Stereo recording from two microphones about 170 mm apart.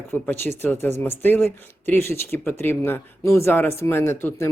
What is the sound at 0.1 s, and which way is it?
Speech, 10° left (ahead or behind).